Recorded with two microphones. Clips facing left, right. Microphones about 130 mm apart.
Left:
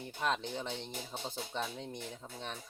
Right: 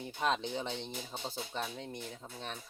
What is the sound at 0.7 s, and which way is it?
Speech, 10° left (ahead or behind).